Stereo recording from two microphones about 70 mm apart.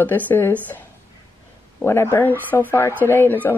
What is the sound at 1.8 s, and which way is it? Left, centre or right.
A woman's voice, left.